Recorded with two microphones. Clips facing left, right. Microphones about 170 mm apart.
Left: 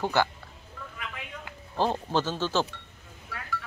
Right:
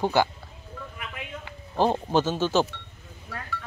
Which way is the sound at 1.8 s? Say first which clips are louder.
Right 4 dB; 15° right (ahead or behind).